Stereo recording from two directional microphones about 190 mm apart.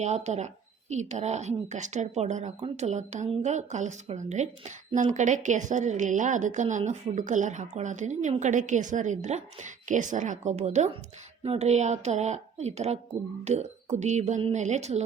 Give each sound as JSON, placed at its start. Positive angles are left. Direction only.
{"t": 0.0, "sound": "a woman's voice", "side_deg": -35}